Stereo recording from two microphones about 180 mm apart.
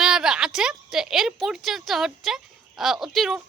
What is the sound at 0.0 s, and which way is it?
Speech, 5° right (ahead or behind).